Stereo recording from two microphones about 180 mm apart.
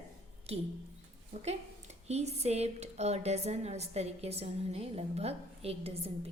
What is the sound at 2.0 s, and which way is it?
A woman's voice, 35° right (ahead or behind).